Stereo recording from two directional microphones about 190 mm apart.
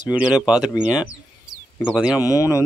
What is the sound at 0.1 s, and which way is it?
Speech, 5° right (ahead or behind).